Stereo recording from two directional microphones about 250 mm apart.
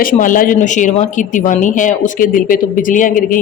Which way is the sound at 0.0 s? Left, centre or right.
Left.